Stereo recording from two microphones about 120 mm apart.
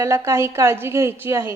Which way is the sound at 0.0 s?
25° right (ahead or behind).